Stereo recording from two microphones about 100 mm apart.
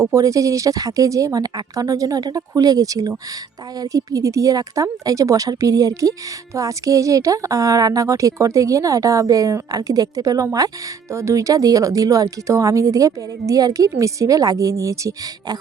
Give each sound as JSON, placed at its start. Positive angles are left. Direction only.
{"t": 0.0, "sound": "a woman's voice", "side_deg": -30}